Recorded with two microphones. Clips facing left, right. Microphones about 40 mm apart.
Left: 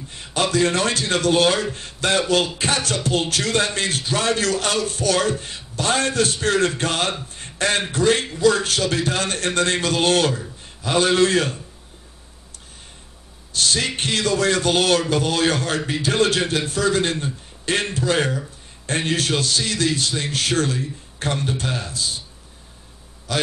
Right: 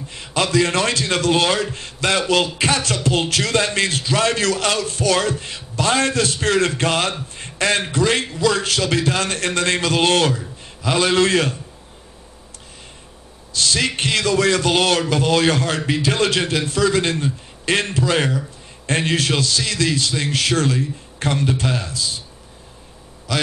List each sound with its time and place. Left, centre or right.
0.1 s a man's voice: right
13.5 s a sound: left
13.7 s a man's voice: right
21.9 s speech: left